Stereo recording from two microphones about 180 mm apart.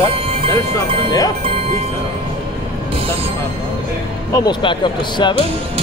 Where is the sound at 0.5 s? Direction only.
20° left (ahead or behind).